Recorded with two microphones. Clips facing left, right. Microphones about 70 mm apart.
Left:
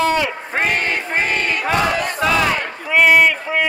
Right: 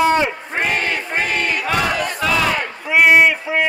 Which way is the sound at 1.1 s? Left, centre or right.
Left.